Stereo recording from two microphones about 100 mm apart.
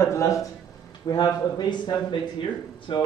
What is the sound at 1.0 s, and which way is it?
Speech, 45° left (ahead or behind).